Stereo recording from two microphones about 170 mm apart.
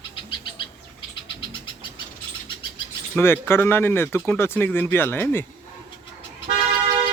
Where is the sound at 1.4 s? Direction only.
30° left (ahead or behind).